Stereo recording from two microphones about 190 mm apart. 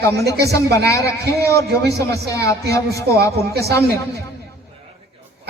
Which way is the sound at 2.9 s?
60° right (ahead or behind).